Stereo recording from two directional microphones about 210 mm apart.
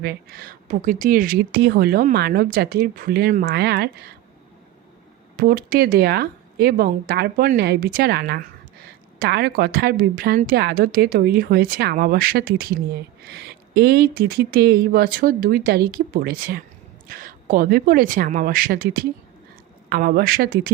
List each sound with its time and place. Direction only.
0.0 s a woman's voice: 45° right (ahead or behind)
5.4 s a woman's voice: 45° right (ahead or behind)